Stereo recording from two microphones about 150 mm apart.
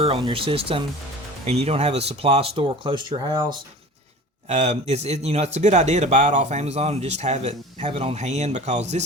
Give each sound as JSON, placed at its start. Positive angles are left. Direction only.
{"t": 0.0, "sound": "speech", "side_deg": -35}
{"t": 4.4, "sound": "speech", "side_deg": -50}